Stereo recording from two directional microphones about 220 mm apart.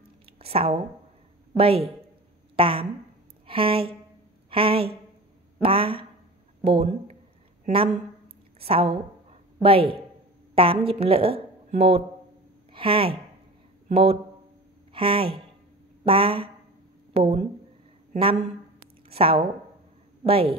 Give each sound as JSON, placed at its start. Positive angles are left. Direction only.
{"t": 0.4, "sound": "a woman's voice", "side_deg": -25}
{"t": 18.1, "sound": "a sound", "side_deg": -25}
{"t": 20.2, "sound": "speech", "side_deg": -25}